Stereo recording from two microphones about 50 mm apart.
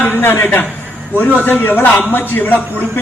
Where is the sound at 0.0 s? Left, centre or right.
Left.